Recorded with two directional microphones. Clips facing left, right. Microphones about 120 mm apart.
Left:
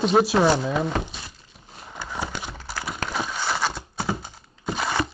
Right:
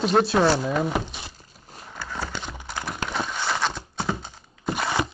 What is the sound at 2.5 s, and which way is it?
Horse, 15° right (ahead or behind).